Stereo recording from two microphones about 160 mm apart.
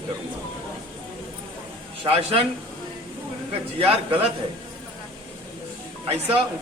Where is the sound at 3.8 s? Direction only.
35° right (ahead or behind).